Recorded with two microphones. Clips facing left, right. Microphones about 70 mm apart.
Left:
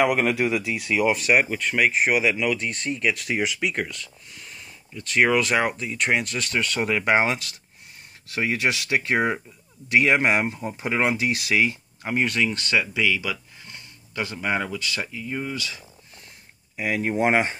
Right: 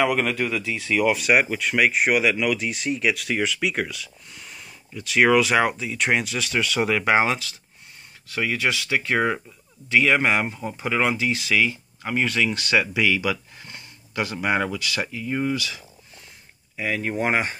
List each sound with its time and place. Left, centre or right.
0.0 s speech: centre
7.0 s speech: centre
8.4 s speech: left
10.5 s speech: centre
10.8 s speech: centre
12.4 s speech: centre
13.0 s a sound: centre
14.4 s speech: centre
16.7 s speech: centre
17.2 s speech: left